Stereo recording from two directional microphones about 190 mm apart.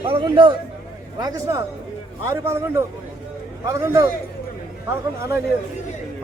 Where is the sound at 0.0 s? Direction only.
25° right (ahead or behind).